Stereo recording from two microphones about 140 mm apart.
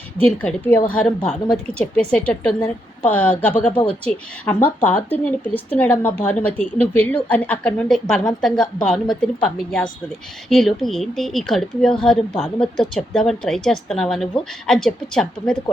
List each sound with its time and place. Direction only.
0.2 s speech: 10° left (ahead or behind)
2.1 s speech: 10° left (ahead or behind)